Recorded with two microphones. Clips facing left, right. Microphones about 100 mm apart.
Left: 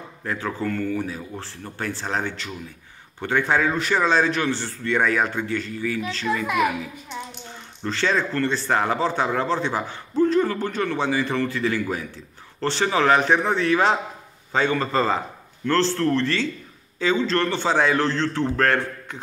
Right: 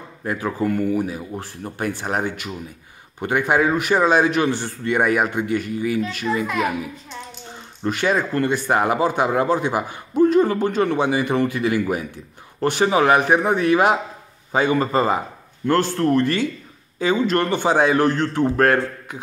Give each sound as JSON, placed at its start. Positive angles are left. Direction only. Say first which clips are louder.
{"t": 0.2, "sound": "a man's voice", "louder": "right 4 dB", "side_deg": -15}
{"t": 6.4, "sound": "a child's voice", "louder": "left 4 dB", "side_deg": 15}
{"t": 7.8, "sound": "a man's voice", "louder": "right 3 dB", "side_deg": -15}